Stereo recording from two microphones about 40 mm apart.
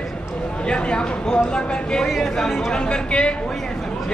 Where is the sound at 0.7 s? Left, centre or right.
Left.